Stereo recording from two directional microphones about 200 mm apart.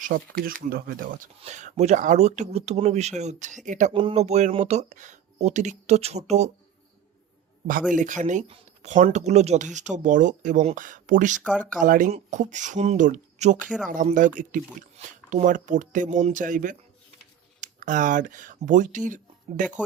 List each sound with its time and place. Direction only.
0.0 s speech: 45° right (ahead or behind)
1.4 s speech: 35° right (ahead or behind)
7.9 s speech: 40° right (ahead or behind)
11.4 s speech: 5° right (ahead or behind)
11.8 s speech: 40° right (ahead or behind)